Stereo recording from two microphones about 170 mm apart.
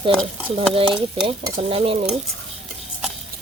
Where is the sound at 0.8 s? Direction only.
30° right (ahead or behind).